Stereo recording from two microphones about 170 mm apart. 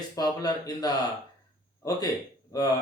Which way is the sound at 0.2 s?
20° left (ahead or behind).